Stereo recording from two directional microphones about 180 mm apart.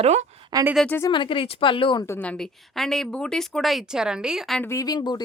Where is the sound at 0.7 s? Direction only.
5° left (ahead or behind).